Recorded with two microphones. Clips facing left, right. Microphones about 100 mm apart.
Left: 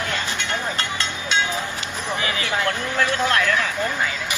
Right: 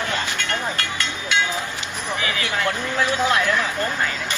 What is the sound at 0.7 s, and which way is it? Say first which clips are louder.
Vehicle: even; 25° left (ahead or behind).